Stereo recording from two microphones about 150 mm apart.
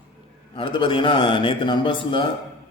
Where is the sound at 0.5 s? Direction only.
35° left (ahead or behind).